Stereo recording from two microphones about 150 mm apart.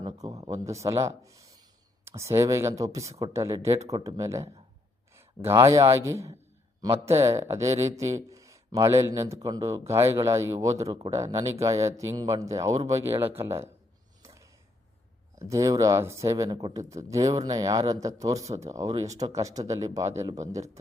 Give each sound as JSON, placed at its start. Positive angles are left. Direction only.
{"t": 0.0, "sound": "speech", "side_deg": -25}
{"t": 14.2, "sound": "a sound", "side_deg": -20}
{"t": 15.4, "sound": "speech", "side_deg": -20}